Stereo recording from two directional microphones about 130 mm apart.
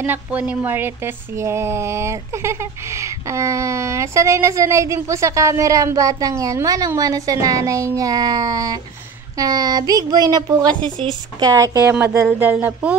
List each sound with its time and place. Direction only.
0.0 s speech: 15° right (ahead or behind)